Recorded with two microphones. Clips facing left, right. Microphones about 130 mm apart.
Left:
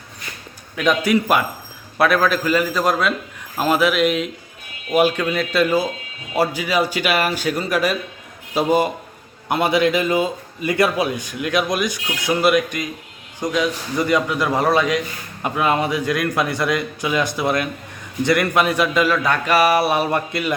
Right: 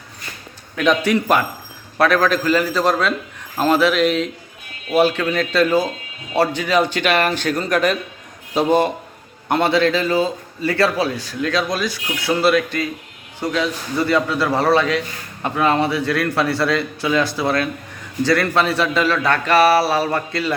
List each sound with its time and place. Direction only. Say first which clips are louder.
0.8 s a man's voice: right 1 dB; 10° left (ahead or behind)